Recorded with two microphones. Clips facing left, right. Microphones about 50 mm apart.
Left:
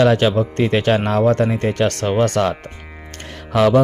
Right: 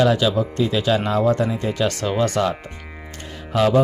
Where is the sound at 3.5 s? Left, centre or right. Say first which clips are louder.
Left 3 dB; left.